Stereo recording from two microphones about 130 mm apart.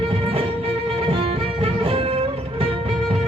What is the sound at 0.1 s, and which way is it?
Music, 45° right (ahead or behind).